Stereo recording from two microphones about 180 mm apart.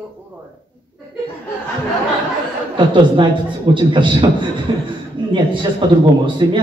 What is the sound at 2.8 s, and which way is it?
A man's voice, 25° right (ahead or behind).